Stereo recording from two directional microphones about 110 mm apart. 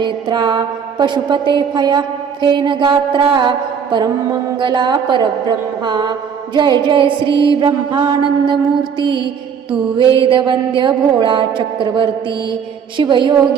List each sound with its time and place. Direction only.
0.0 s mantra: 45° right (ahead or behind)